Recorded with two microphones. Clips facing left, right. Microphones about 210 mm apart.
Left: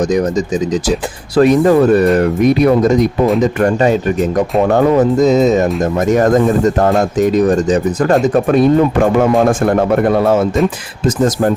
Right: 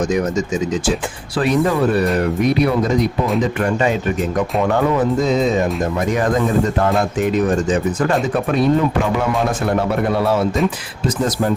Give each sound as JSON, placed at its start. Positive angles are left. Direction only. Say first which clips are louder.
{"t": 0.0, "sound": "speech", "louder": "left 4 dB", "side_deg": 35}